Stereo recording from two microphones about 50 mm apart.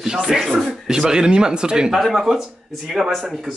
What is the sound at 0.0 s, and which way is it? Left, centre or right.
Speech, centre.